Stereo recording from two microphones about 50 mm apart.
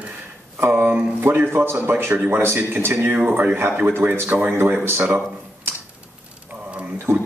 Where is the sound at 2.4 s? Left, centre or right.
Right.